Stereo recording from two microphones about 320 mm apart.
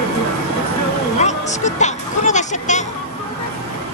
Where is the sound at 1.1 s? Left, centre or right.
Left.